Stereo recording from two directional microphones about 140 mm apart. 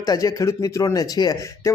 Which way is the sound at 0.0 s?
25° left (ahead or behind).